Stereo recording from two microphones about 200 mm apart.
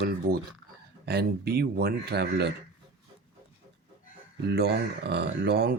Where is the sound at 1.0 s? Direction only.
50° right (ahead or behind).